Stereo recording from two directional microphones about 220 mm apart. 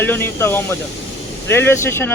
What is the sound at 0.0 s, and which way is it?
Speech, 10° left (ahead or behind).